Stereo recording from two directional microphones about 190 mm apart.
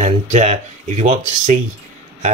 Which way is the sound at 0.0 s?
35° right (ahead or behind).